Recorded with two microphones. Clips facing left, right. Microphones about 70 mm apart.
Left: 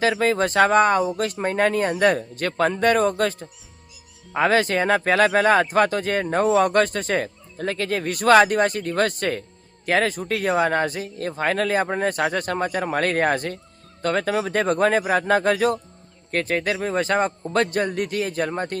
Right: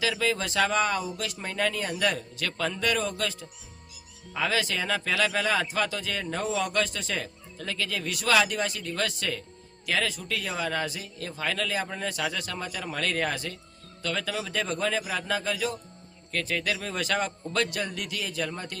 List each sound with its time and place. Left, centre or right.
0.0 s speech: left